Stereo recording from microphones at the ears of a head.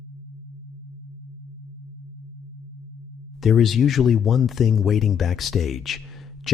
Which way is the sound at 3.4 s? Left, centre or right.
Left.